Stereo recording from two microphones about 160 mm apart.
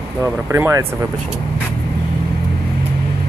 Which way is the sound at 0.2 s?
15° right (ahead or behind).